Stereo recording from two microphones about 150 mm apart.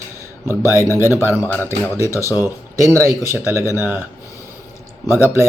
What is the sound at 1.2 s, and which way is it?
Speech, 10° right (ahead or behind).